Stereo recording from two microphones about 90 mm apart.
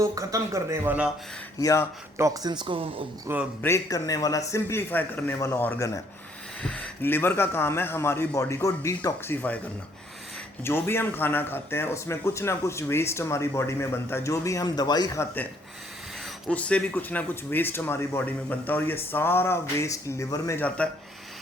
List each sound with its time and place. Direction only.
0.0 s speech: 40° right (ahead or behind)
1.5 s speech: 45° left (ahead or behind)
2.1 s speech: 35° right (ahead or behind); by 3.0 s 85° right
3.3 s a man's voice: 25° right (ahead or behind)
3.8 s speech: 45° left (ahead or behind); by 5.8 s 25° left (ahead or behind)
6.6 s a sound: 10° left (ahead or behind)
7.0 s speech: 25° left (ahead or behind)
9.2 s speech: 20° left (ahead or behind)
10.6 s speech: 25° left (ahead or behind); by 15.1 s 50° left (ahead or behind)
16.5 s speech: 15° left (ahead or behind); by 20.6 s 40° left (ahead or behind)
20.6 s speech: 15° left (ahead or behind)